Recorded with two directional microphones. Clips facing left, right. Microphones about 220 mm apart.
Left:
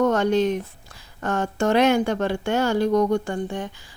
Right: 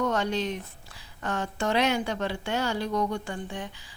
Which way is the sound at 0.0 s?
50° left (ahead or behind).